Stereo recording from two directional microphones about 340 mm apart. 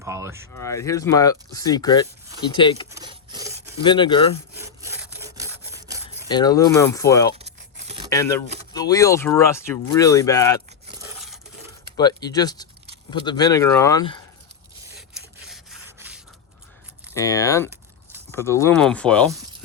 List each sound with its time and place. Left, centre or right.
0.0 s speech: centre
0.5 s speech: centre
2.9 s rub: centre
3.8 s speech: centre
4.5 s sawing: centre
6.2 s speech: centre
7.9 s a sound: centre
8.1 s speech: centre
11.9 s speech: centre
15.4 s rub: centre
17.2 s speech: centre